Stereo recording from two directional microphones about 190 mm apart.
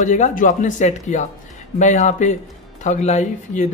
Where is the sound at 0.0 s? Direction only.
40° left (ahead or behind).